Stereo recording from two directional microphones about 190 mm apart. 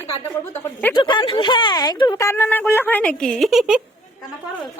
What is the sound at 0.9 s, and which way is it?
Speech, 25° left (ahead or behind).